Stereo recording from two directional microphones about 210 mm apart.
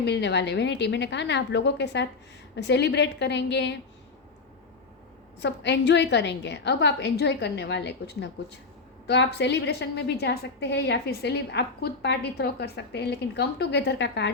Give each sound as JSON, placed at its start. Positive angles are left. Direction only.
{"t": 0.0, "sound": "a woman's voice", "side_deg": 55}
{"t": 5.4, "sound": "a woman's voice", "side_deg": 55}